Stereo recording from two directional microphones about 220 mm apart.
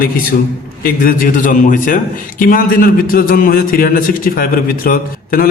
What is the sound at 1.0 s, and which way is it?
A man's voice, 40° left (ahead or behind).